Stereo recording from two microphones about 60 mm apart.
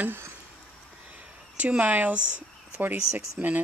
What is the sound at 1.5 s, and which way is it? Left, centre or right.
Speech, right.